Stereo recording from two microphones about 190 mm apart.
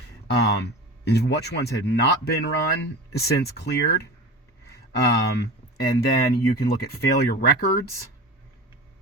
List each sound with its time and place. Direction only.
0.3 s speech: 65° left (ahead or behind)